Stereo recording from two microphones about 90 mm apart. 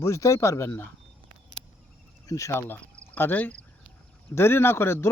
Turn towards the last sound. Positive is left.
turn(degrees=25)  # may be behind; listen again after turning